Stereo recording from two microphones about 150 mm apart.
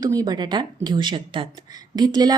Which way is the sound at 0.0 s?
25° right (ahead or behind).